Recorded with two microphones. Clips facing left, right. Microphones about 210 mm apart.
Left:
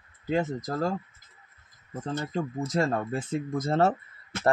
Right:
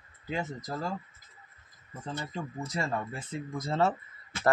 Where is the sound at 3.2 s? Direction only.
45° left (ahead or behind).